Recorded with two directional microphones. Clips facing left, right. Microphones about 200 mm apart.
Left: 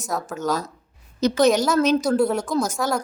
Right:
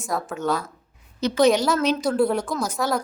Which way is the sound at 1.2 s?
40° left (ahead or behind).